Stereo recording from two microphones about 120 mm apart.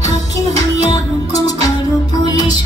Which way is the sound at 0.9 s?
30° left (ahead or behind).